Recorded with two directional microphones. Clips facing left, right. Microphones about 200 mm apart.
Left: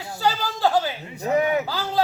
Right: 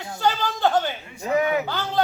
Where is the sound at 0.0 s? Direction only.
5° left (ahead or behind).